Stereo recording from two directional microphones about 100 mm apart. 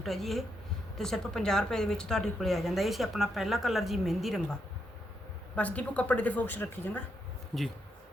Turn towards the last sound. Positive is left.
turn(degrees=0)  # may be behind; listen again after turning